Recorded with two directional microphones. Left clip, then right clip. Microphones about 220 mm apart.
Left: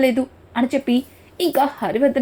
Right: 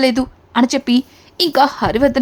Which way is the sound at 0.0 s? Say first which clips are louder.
Right 2 dB; 20° right (ahead or behind).